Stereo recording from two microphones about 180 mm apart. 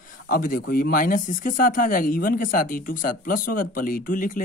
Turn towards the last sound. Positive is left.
turn(degrees=50)  # may be behind; listen again after turning